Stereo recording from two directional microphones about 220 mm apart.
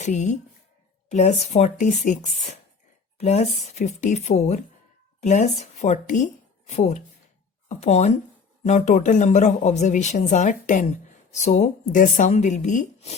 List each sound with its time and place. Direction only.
0.0 s speech: 30° left (ahead or behind)